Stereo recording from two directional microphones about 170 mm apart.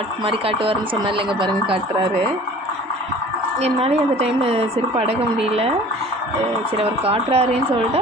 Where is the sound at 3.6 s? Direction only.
35° right (ahead or behind).